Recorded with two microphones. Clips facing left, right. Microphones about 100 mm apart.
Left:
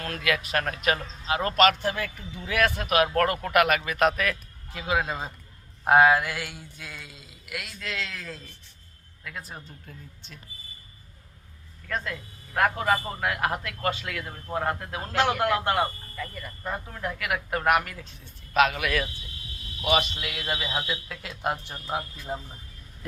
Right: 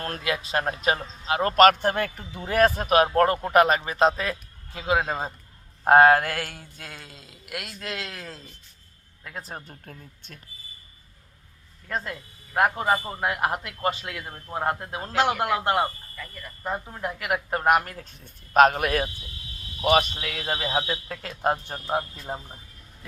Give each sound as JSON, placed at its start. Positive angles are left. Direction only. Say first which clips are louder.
{"t": 0.0, "sound": "a man's voice", "louder": "left 1 dB", "side_deg": -30}
{"t": 5.8, "sound": "a sound", "louder": "right 3 dB", "side_deg": -40}
{"t": 9.5, "sound": "a sound", "louder": "right 3 dB", "side_deg": -45}
{"t": 11.9, "sound": "speech", "louder": "right 1 dB", "side_deg": -30}
{"t": 15.4, "sound": "a man's voice", "louder": "right 1 dB", "side_deg": -10}
{"t": 16.1, "sound": "speech", "louder": "left 4 dB", "side_deg": 0}
{"t": 16.6, "sound": "a man's voice", "louder": "right 2 dB", "side_deg": -15}